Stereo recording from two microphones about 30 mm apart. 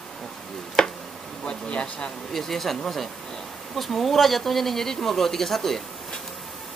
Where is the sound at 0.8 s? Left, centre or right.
Centre.